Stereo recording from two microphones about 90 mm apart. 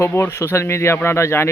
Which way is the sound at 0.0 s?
25° left (ahead or behind).